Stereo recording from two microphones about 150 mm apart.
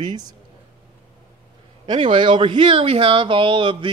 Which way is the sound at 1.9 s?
35° right (ahead or behind).